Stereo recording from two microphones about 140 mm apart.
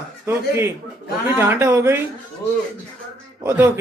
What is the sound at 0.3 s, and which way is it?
Speech, 15° right (ahead or behind).